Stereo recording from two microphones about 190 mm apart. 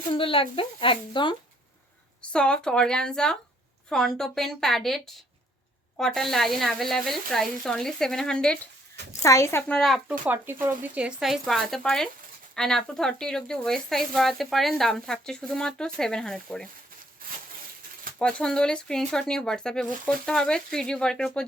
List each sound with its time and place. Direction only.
0.1 s a woman's voice: 30° left (ahead or behind)
2.3 s a woman's voice: 5° left (ahead or behind)
9.2 s speech: 15° left (ahead or behind)
10.2 s speech: 10° right (ahead or behind)
18.2 s speech: 5° left (ahead or behind)